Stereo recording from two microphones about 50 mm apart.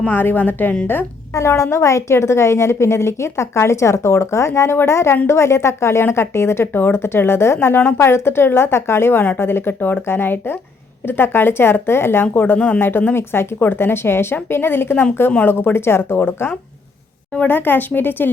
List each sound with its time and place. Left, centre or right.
0.1 s speech: left
1.3 s a woman's voice: left
12.5 s speech: left
12.8 s speech: left
13.3 s speech: left